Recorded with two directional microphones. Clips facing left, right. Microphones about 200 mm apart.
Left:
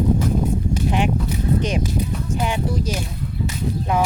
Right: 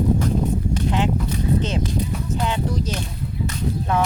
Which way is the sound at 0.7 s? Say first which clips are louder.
Left 2 dB; 15° left (ahead or behind).